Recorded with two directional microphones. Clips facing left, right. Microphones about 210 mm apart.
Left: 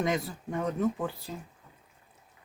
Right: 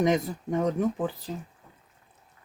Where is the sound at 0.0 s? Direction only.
20° right (ahead or behind).